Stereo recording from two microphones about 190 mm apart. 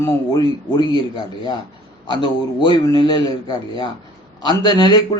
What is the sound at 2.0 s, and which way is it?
A man's voice, 25° left (ahead or behind).